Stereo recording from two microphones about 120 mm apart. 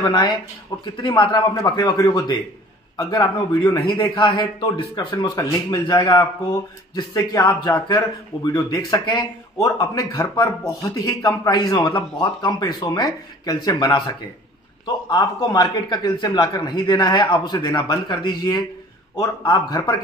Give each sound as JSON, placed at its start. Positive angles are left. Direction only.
{"t": 0.1, "sound": "a man's voice", "side_deg": 40}